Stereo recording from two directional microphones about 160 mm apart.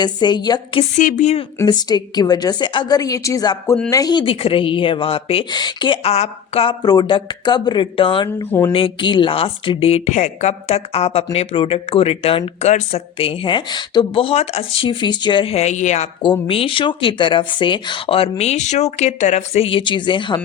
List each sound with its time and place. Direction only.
0.0 s a woman's voice: 25° left (ahead or behind)
0.9 s a woman's voice: 50° left (ahead or behind)
1.5 s a woman's voice: 25° left (ahead or behind)
6.8 s a woman's voice: 25° left (ahead or behind)
8.4 s speech: 15° left (ahead or behind)
8.7 s speech: 35° left (ahead or behind)
16.5 s speech: 35° left (ahead or behind)